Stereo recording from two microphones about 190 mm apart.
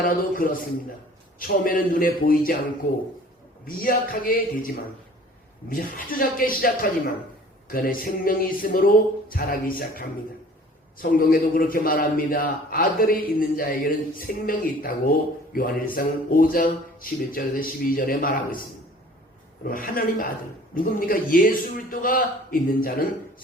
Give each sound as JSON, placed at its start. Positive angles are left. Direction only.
{"t": 0.2, "sound": "a man's voice", "side_deg": 50}
{"t": 3.8, "sound": "a man's voice", "side_deg": 50}
{"t": 7.7, "sound": "a man's voice", "side_deg": 50}
{"t": 11.0, "sound": "a man's voice", "side_deg": 50}
{"t": 19.6, "sound": "a man's voice", "side_deg": 45}